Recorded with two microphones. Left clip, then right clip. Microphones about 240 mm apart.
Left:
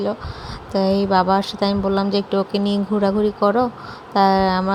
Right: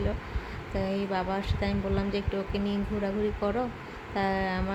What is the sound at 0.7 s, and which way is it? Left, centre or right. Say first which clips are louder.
A woman's voice: left 14 dB; left.